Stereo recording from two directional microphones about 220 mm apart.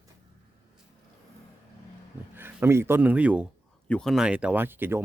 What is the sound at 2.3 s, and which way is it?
Speech, 10° right (ahead or behind).